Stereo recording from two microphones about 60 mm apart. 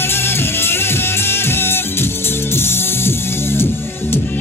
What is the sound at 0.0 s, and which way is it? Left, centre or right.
Music, left.